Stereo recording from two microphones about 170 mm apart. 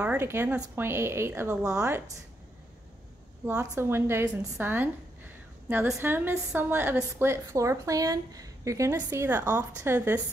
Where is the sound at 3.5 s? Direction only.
15° right (ahead or behind).